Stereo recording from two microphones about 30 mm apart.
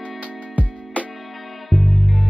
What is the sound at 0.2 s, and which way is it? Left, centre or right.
Music, right.